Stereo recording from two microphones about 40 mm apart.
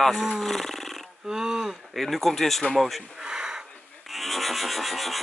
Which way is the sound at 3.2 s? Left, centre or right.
Centre.